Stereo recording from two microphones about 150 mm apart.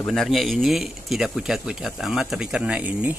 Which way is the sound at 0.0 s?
5° left (ahead or behind).